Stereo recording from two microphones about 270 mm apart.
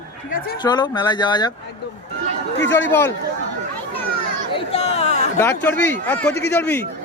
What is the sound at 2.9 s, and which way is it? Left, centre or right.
Speech, centre.